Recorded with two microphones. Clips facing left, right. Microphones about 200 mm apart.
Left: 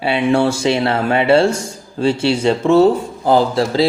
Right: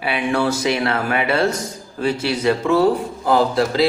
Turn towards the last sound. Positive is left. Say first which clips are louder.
# left 3 dB
turn(degrees=30)  # may be behind; listen again after turning